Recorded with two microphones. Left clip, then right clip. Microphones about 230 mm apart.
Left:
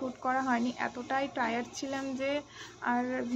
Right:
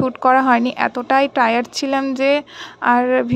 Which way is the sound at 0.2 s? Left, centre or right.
Right.